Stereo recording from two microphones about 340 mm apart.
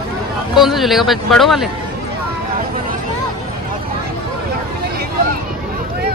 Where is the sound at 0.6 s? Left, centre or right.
Centre.